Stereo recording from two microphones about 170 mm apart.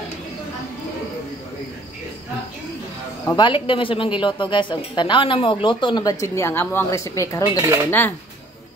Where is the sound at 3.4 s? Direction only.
30° left (ahead or behind).